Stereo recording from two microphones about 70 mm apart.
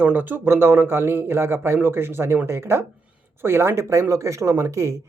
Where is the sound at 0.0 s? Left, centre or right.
Right.